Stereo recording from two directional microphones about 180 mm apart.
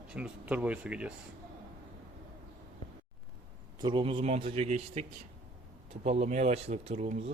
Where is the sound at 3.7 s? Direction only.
25° right (ahead or behind).